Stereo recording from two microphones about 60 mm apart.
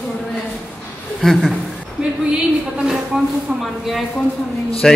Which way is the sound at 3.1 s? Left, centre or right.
Centre.